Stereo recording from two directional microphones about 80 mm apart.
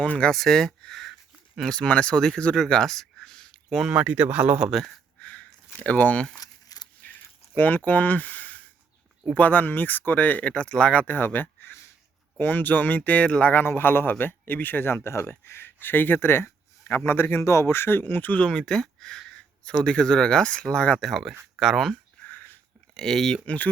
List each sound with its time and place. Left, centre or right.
0.0 s speech: centre
2.6 s a sound: centre
3.8 s a man's voice: centre
5.2 s a sound: centre
6.3 s crumpling: left
7.0 s keys jangling: left
7.5 s speech: left
7.9 s a sound: left
9.3 s speech: left
21.0 s speech: centre
22.3 s a sound: left
23.0 s speech: centre